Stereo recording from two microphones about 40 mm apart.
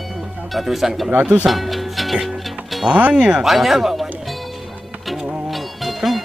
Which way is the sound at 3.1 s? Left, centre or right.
Centre.